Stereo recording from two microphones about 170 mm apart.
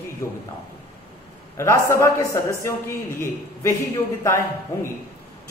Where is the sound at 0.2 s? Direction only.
20° left (ahead or behind).